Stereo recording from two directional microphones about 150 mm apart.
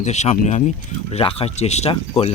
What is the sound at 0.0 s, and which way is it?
Speech, 50° left (ahead or behind).